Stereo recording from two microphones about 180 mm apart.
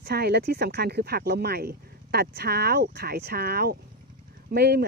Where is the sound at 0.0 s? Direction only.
60° right (ahead or behind).